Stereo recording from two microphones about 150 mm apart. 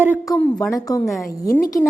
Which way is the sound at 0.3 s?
15° left (ahead or behind).